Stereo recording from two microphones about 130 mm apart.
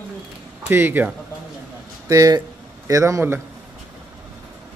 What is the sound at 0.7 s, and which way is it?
Speech, 15° right (ahead or behind).